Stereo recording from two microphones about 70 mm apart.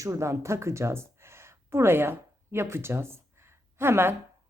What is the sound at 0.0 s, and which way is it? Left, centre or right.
Speech, right.